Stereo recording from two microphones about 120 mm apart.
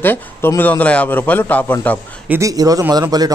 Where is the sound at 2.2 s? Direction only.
20° right (ahead or behind).